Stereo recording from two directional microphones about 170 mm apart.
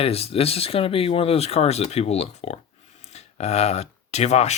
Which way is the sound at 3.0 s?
40° left (ahead or behind).